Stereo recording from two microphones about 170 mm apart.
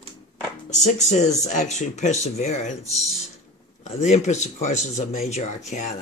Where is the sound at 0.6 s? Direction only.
45° left (ahead or behind).